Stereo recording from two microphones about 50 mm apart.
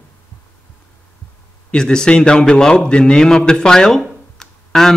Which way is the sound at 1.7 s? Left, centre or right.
Centre.